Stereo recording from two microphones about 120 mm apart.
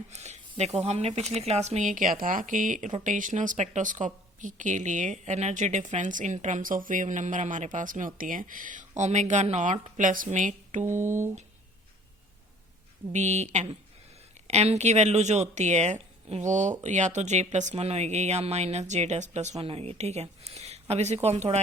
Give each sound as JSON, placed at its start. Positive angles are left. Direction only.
{"t": 0.1, "sound": "speech", "side_deg": -70}
{"t": 10.0, "sound": "speech", "side_deg": -90}
{"t": 13.1, "sound": "speech", "side_deg": -70}
{"t": 19.6, "sound": "speech", "side_deg": -55}